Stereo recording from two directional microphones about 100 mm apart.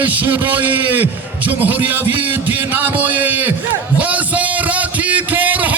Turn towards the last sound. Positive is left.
turn(degrees=-15)  # may be behind; listen again after turning